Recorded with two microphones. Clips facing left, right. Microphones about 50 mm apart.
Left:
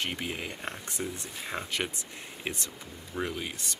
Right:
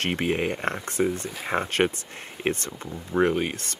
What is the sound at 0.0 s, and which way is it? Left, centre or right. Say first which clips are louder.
Speech: right 9 dB; right.